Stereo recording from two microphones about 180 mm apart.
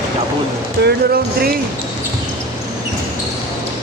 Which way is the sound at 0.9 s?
55° right (ahead or behind).